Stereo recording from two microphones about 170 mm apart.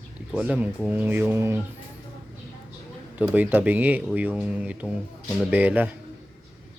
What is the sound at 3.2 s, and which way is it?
Speech, 10° right (ahead or behind).